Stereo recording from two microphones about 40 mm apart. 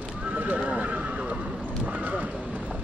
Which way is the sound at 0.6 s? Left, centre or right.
Right.